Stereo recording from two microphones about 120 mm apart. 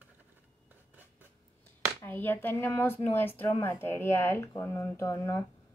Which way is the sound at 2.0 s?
15° left (ahead or behind).